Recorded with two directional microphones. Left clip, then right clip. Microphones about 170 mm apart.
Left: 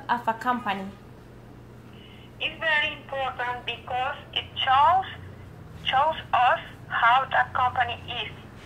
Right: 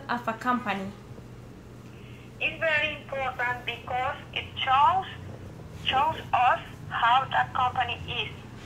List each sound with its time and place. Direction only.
0.0 s a woman's voice: centre (ahead or behind)
2.3 s a woman's voice: 5° left (ahead or behind)